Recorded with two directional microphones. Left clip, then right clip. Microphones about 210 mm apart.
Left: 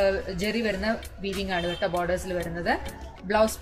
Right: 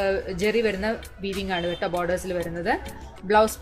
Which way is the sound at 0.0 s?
50° right (ahead or behind).